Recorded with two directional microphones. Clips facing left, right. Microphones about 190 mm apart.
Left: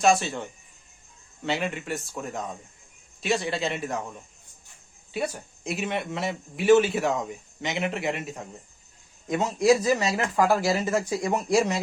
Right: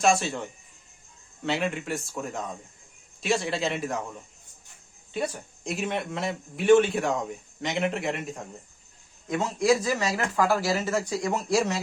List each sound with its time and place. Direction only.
0.0 s speech: centre (ahead or behind)
1.5 s speech: centre (ahead or behind)
5.1 s speech: 5° left (ahead or behind)
9.3 s speech: 20° left (ahead or behind)